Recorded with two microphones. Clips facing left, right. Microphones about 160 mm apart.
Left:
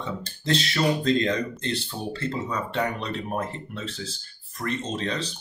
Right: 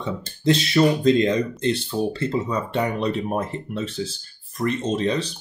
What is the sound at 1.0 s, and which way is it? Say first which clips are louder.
Speech: right 5 dB; 15° right (ahead or behind).